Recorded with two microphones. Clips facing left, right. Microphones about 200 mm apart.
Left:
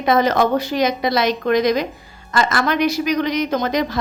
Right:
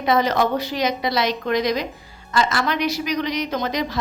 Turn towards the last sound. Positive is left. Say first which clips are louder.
# left 4 dB
turn(degrees=50)  # may be behind; listen again after turning